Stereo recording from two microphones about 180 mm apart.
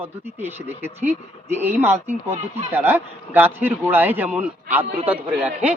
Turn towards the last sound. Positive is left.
turn(degrees=-10)  # may be behind; listen again after turning